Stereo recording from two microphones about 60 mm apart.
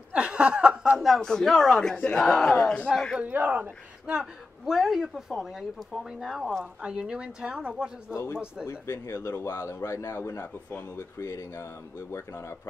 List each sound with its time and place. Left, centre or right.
0.1 s chuckle: centre
0.9 s speech: centre
2.5 s speech: left
3.2 s speech: right
4.0 s a sound: centre
4.7 s speech: centre
6.6 s speech: centre
8.1 s a man's voice: left